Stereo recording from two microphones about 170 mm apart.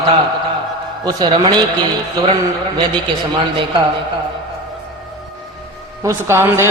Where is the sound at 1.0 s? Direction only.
25° right (ahead or behind).